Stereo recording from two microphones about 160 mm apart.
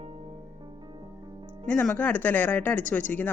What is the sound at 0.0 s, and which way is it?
Music, 40° right (ahead or behind).